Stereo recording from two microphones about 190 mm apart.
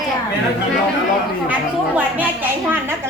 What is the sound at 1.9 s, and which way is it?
Speech, 10° right (ahead or behind).